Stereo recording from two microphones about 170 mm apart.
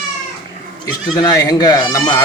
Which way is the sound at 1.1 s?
20° left (ahead or behind).